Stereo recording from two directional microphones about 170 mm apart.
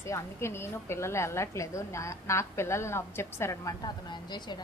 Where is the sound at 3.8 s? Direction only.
25° left (ahead or behind).